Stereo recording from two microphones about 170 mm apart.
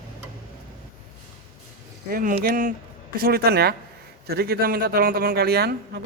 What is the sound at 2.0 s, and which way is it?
Speech, 55° right (ahead or behind).